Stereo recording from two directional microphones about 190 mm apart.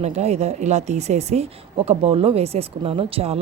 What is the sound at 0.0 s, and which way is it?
A woman's voice, 35° right (ahead or behind).